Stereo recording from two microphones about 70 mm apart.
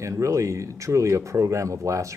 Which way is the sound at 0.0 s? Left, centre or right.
Right.